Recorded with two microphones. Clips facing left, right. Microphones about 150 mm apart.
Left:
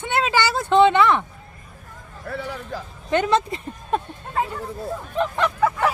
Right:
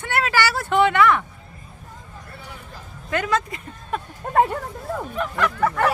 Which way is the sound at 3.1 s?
25° left (ahead or behind).